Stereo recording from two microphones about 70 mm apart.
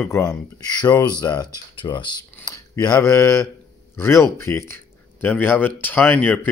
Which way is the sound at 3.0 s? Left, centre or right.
Left.